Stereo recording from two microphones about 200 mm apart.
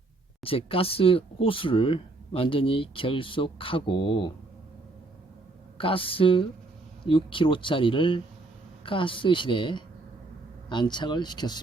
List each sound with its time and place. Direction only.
0.4 s speech: 30° left (ahead or behind)
5.7 s speech: 25° left (ahead or behind)